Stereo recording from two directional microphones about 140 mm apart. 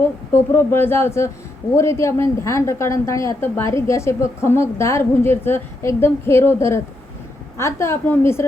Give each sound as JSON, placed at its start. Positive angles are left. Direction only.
{"t": 0.5, "sound": "a woman's voice", "side_deg": 15}